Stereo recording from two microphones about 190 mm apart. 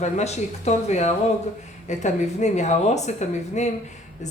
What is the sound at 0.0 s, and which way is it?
Speech, 35° left (ahead or behind).